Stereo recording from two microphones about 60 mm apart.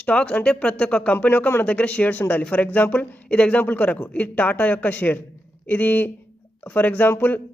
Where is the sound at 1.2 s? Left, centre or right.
Left.